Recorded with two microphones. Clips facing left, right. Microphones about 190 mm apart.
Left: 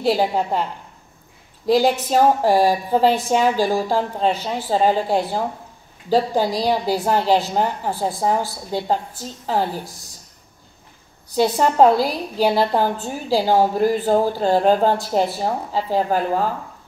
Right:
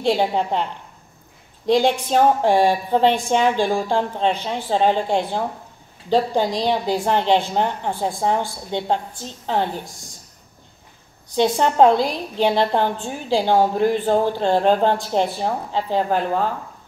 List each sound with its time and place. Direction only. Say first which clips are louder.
0.0 s a woman's voice: even; 5° left (ahead or behind)
1.7 s a woman's voice: left 1 dB; 5° left (ahead or behind)
11.3 s a woman's voice: even; 5° left (ahead or behind)